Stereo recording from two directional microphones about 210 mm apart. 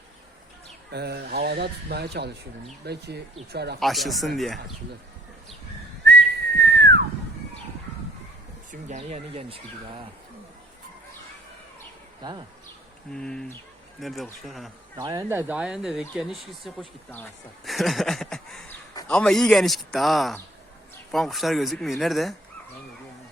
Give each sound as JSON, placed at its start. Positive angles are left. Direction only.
{"t": 0.9, "sound": "speech", "side_deg": -50}
{"t": 3.8, "sound": "speech", "side_deg": 0}
{"t": 6.1, "sound": "whistling", "side_deg": -50}
{"t": 8.7, "sound": "speech", "side_deg": -35}
{"t": 12.2, "sound": "speech", "side_deg": -20}
{"t": 13.1, "sound": "speech", "side_deg": 5}
{"t": 14.9, "sound": "speech", "side_deg": -15}
{"t": 17.7, "sound": "a sound", "side_deg": 0}
{"t": 19.0, "sound": "speech", "side_deg": 5}